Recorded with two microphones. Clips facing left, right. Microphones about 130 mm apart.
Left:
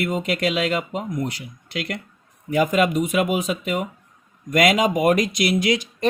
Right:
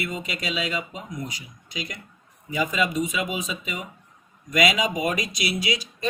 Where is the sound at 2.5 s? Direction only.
55° left (ahead or behind).